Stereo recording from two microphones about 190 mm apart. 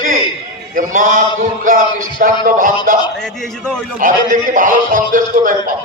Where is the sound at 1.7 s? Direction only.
45° right (ahead or behind).